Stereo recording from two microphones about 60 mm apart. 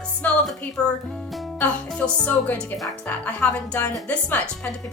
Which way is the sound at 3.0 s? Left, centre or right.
Left.